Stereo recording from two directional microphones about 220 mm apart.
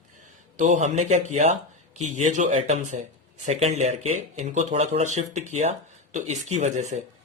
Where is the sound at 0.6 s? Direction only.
35° right (ahead or behind).